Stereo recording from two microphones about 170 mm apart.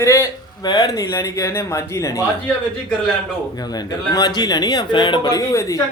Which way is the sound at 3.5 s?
25° left (ahead or behind).